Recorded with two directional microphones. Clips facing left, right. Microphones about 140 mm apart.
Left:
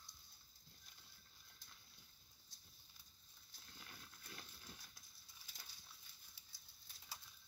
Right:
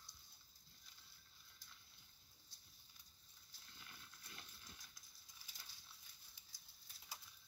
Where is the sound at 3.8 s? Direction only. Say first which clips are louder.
Left 2 dB; 40° left (ahead or behind).